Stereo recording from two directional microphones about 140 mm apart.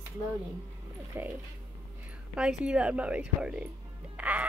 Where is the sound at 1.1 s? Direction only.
15° right (ahead or behind).